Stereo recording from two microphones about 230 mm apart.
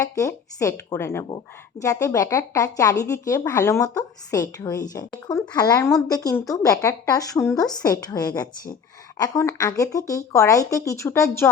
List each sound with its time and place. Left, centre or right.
0.0 s a woman's voice: centre